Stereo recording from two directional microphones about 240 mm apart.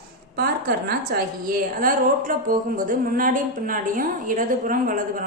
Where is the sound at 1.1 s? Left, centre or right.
Right.